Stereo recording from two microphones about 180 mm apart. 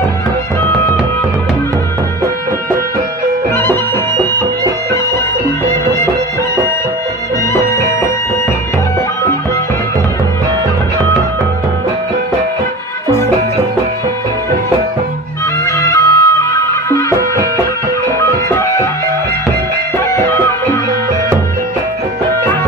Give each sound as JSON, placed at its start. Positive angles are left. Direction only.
{"t": 7.5, "sound": "music", "side_deg": 15}
{"t": 15.6, "sound": "music", "side_deg": 15}
{"t": 18.5, "sound": "music", "side_deg": 15}
{"t": 20.0, "sound": "music", "side_deg": 15}